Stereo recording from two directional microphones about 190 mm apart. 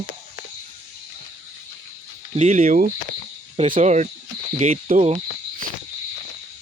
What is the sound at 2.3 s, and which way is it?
Speech, 35° right (ahead or behind).